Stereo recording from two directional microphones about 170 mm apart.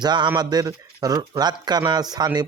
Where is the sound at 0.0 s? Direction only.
25° right (ahead or behind).